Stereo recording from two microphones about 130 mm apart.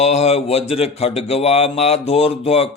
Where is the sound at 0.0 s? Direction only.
55° left (ahead or behind).